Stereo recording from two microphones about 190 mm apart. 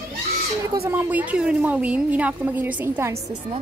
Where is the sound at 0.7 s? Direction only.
15° right (ahead or behind).